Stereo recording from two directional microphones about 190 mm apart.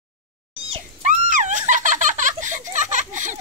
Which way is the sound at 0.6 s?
30° right (ahead or behind).